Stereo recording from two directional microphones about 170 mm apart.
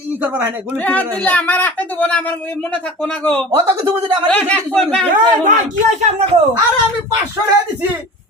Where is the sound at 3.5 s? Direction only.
20° right (ahead or behind).